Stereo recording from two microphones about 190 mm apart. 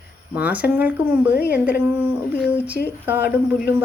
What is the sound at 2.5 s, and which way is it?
Speech, 10° right (ahead or behind).